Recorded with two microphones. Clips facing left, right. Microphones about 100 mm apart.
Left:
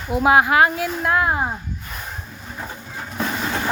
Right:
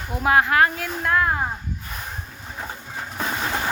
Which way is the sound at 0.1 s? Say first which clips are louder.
Left 4 dB; 10° left (ahead or behind).